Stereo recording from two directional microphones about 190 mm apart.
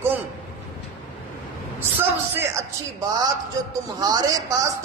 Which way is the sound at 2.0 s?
10° right (ahead or behind).